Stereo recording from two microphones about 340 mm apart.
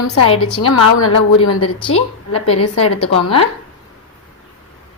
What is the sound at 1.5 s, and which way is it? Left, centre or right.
Speech, left.